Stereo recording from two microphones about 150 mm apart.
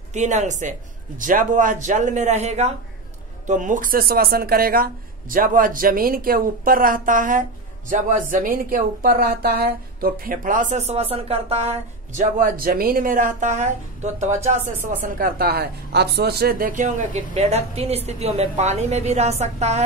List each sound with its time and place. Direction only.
0.1 s a woman's voice: 50° right (ahead or behind)
3.4 s a woman's voice: 60° right (ahead or behind)